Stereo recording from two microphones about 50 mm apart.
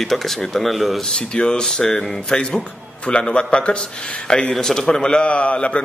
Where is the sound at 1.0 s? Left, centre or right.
Centre.